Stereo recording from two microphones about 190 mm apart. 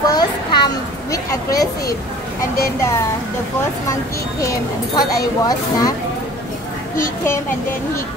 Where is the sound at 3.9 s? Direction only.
15° left (ahead or behind).